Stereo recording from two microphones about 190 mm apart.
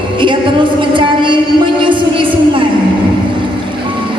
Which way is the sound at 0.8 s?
25° right (ahead or behind).